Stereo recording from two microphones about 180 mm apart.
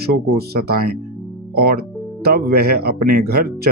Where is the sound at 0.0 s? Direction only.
60° right (ahead or behind).